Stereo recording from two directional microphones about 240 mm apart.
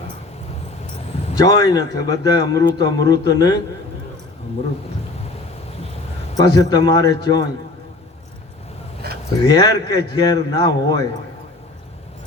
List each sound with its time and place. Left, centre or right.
1.4 s speech: centre
6.3 s speech: centre
9.0 s keys jangling: right
9.4 s speech: centre